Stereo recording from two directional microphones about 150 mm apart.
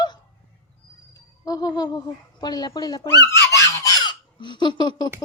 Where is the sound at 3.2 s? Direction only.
20° left (ahead or behind).